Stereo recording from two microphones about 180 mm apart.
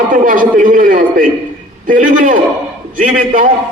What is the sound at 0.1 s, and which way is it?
A man's voice, 50° right (ahead or behind).